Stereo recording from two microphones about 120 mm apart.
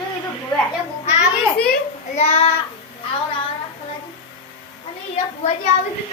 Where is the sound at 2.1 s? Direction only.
60° left (ahead or behind).